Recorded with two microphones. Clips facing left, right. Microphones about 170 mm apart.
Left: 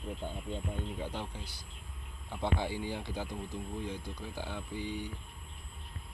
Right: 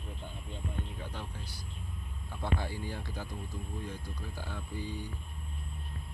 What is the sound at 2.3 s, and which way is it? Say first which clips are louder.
Speech: left 2 dB; 20° left (ahead or behind).